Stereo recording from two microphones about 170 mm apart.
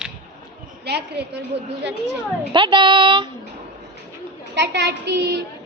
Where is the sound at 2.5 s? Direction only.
25° right (ahead or behind).